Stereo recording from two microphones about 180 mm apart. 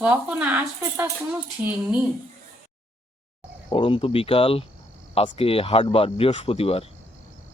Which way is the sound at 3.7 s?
30° left (ahead or behind).